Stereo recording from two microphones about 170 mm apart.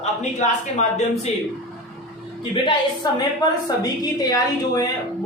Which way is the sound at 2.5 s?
30° left (ahead or behind).